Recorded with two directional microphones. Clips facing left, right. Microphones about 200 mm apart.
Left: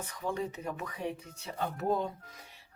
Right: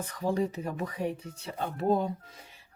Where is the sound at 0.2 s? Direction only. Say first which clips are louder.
Right 6 dB; 35° right (ahead or behind).